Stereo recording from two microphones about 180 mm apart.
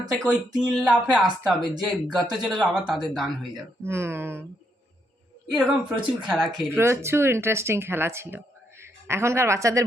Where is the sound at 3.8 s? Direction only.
15° right (ahead or behind).